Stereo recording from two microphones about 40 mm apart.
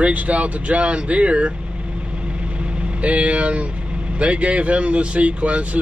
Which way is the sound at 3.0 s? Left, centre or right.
Right.